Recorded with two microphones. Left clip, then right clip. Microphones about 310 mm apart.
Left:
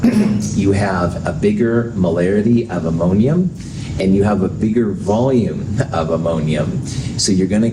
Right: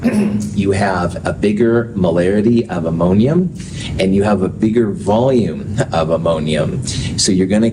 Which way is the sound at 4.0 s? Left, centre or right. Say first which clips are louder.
Right 1 dB; right.